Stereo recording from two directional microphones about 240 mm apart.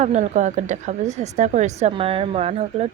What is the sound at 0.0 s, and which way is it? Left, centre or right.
Speech, right.